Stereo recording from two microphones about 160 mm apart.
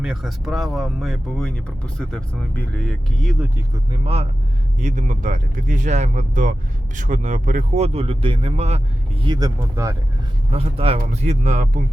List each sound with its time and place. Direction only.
0.0 s speech: 5° right (ahead or behind)
3.9 s speech: 40° right (ahead or behind)
9.2 s speech: 25° right (ahead or behind)
10.5 s speech: 40° right (ahead or behind)